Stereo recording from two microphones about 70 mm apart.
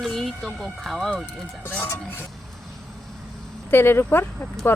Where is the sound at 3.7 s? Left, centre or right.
Left.